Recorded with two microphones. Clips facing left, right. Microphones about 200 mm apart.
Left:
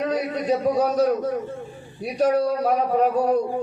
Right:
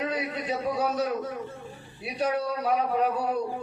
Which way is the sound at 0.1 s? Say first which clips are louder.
Left 7 dB; 40° left (ahead or behind).